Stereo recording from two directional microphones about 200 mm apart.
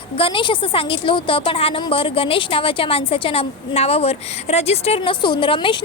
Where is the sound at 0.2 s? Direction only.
25° left (ahead or behind).